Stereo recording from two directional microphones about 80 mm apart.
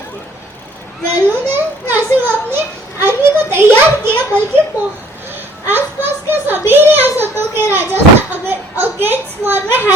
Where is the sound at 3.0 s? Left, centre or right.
Right.